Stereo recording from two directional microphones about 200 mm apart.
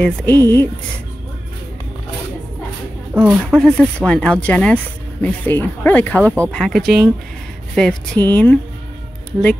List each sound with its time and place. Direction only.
0.0 s speech: 5° left (ahead or behind)
3.2 s speech: 5° right (ahead or behind)
6.2 s speech: 10° right (ahead or behind)
6.5 s speech: centre (ahead or behind)